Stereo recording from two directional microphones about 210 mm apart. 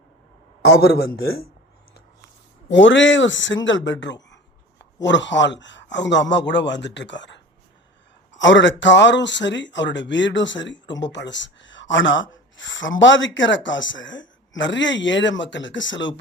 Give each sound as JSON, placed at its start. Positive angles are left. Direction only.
{"t": 0.8, "sound": "speech", "side_deg": 45}
{"t": 2.6, "sound": "speech", "side_deg": 60}